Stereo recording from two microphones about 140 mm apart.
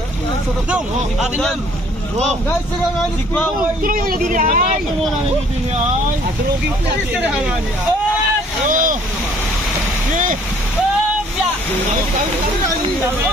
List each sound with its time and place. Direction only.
0.7 s speech: 5° right (ahead or behind)
3.8 s speech: 90° right; by 4.7 s 70° right (ahead or behind)
8.6 s speech: 70° right (ahead or behind)